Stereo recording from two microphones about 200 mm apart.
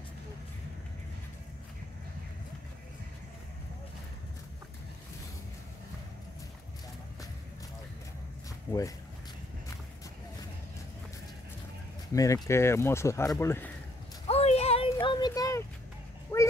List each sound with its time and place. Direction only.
8.7 s speech: 10° left (ahead or behind)
12.1 s speech: 15° left (ahead or behind)
14.2 s a sound: 30° left (ahead or behind); by 16.5 s 10° left (ahead or behind)